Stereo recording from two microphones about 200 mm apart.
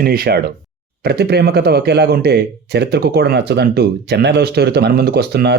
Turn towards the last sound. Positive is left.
turn(degrees=-55)  # may be behind; listen again after turning